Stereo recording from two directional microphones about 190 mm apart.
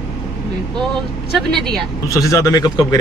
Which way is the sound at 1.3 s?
5° left (ahead or behind).